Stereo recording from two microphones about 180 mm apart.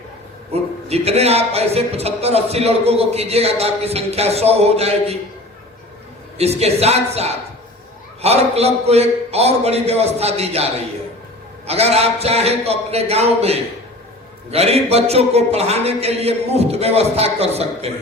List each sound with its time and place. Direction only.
0.5 s speech: 35° right (ahead or behind)
6.3 s speech: 35° right (ahead or behind)